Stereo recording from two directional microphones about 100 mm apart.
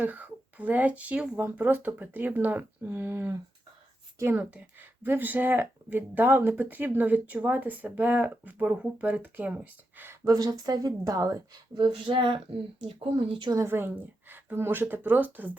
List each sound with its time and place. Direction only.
0.0 s speech: 15° right (ahead or behind)
1.4 s speech: 20° right (ahead or behind)
10.2 s a woman's voice: 35° right (ahead or behind); by 13.5 s 60° right (ahead or behind)
13.7 s speech: 20° right (ahead or behind)